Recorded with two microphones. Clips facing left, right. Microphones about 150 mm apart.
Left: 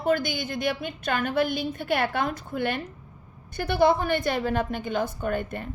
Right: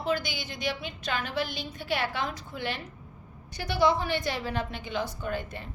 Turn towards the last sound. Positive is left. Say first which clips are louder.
# left 5 dB
turn(degrees=55)  # may be behind; listen again after turning